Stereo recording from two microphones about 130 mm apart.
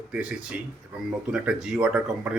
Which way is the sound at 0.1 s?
10° right (ahead or behind).